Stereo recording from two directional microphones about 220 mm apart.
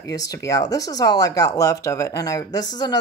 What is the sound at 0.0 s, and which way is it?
Speech, 15° left (ahead or behind).